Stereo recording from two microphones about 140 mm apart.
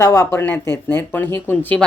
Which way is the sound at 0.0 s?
20° left (ahead or behind).